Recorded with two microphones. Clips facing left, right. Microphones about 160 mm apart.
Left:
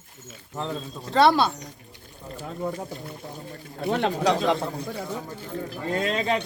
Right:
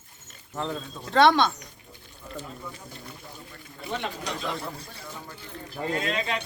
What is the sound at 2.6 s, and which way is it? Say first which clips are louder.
Speech: left 12 dB; 65° left (ahead or behind).